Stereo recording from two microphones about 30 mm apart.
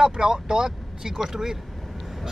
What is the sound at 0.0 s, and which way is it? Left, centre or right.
Speech, right.